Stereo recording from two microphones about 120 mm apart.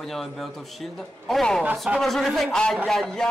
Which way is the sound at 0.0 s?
Centre (ahead or behind).